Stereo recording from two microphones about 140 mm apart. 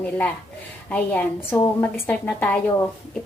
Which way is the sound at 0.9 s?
10° left (ahead or behind).